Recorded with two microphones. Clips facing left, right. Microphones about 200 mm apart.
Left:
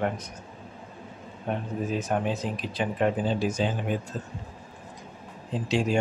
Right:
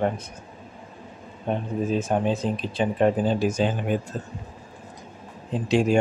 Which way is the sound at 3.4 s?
50° right (ahead or behind).